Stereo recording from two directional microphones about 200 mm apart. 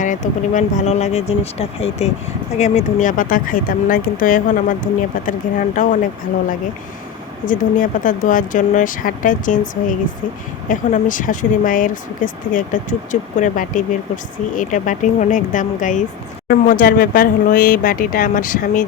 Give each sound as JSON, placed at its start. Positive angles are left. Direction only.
{"t": 0.0, "sound": "speech", "side_deg": 40}
{"t": 7.4, "sound": "speech", "side_deg": 40}
{"t": 10.7, "sound": "speech", "side_deg": 40}